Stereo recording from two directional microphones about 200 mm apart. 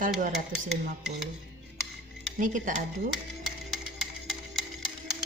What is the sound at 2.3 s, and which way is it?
Speech, 40° right (ahead or behind).